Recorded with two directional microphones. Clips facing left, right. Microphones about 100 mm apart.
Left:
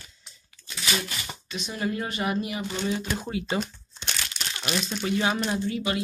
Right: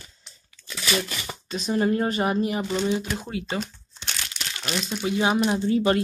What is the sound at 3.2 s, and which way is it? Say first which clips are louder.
Speech: left 1 dB; 5° left (ahead or behind).